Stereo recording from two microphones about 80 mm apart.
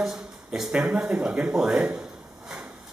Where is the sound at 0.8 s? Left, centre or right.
Centre.